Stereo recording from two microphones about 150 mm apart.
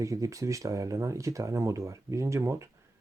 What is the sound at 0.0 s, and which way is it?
Speech, 20° right (ahead or behind).